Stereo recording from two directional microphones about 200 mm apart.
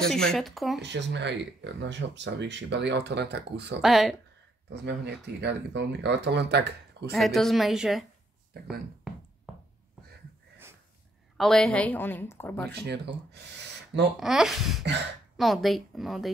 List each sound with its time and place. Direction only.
0.0 s speech: 5° left (ahead or behind)
0.7 s speech: 60° right (ahead or behind)
3.8 s speech: centre (ahead or behind)
4.8 s speech: 60° right (ahead or behind)
7.1 s speech: centre (ahead or behind)
11.3 s a woman's voice: centre (ahead or behind)
12.8 s speech: 55° right (ahead or behind)
14.2 s speech: centre (ahead or behind)